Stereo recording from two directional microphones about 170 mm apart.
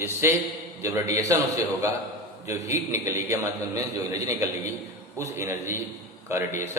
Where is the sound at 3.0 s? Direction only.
15° right (ahead or behind).